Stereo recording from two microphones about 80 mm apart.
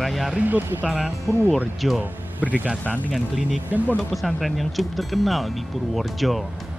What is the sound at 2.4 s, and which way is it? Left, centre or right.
Speech, centre.